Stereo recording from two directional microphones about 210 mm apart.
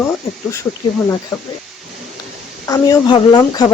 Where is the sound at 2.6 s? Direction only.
15° left (ahead or behind).